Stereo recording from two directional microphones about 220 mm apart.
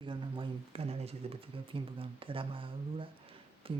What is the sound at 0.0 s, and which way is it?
Speech, 20° right (ahead or behind).